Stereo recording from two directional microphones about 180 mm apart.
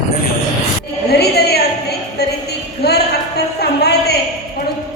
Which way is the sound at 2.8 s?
65° left (ahead or behind).